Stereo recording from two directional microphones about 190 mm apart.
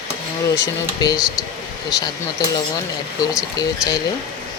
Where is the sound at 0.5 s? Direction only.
20° left (ahead or behind).